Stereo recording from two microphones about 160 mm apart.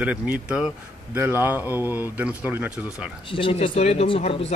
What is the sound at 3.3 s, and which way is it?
Speech, 35° left (ahead or behind).